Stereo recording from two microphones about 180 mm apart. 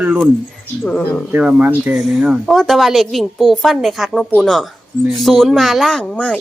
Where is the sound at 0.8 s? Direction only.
5° left (ahead or behind).